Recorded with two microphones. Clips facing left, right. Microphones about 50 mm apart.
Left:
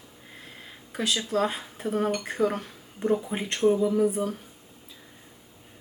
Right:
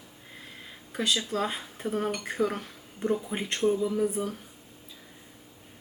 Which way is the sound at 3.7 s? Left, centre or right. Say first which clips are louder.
Left 5 dB; centre.